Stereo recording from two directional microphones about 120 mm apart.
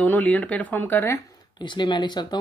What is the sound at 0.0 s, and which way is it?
Speech, 10° left (ahead or behind).